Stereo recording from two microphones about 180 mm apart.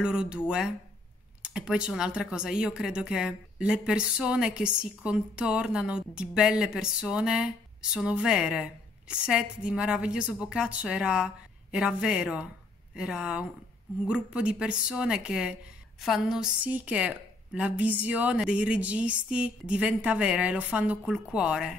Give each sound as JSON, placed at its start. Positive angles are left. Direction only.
{"t": 0.0, "sound": "speech", "side_deg": -5}
{"t": 1.4, "sound": "a woman's voice", "side_deg": -5}